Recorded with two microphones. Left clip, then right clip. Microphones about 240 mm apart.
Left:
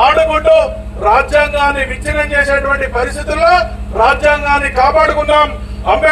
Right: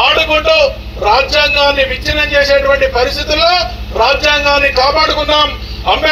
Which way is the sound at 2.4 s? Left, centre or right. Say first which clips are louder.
Right 4 dB; left.